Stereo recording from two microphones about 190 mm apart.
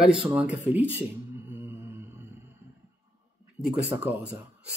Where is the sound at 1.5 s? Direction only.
10° right (ahead or behind).